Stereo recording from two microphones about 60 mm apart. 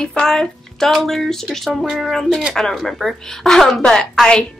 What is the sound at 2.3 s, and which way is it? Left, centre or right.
Speech, centre.